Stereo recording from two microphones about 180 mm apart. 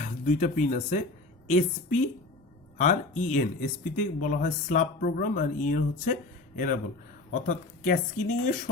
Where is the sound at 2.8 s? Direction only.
40° left (ahead or behind).